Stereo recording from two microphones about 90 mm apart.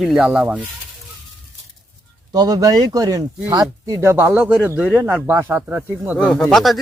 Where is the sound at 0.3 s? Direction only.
15° right (ahead or behind).